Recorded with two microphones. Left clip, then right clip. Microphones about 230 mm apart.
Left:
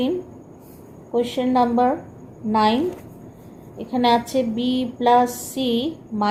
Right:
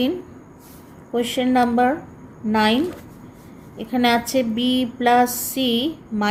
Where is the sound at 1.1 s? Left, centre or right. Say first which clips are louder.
Even; right.